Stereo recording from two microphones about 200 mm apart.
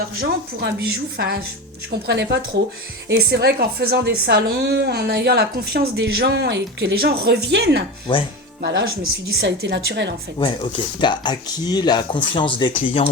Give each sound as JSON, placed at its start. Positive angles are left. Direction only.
{"t": 0.2, "sound": "a woman's voice", "side_deg": -55}
{"t": 10.3, "sound": "speech", "side_deg": 25}